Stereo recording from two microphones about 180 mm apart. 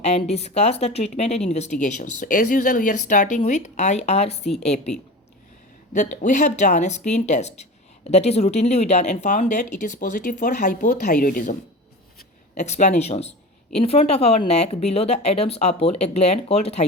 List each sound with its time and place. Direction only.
0.0 s speech: 35° left (ahead or behind)
5.9 s speech: 45° left (ahead or behind)
12.5 s speech: 40° left (ahead or behind)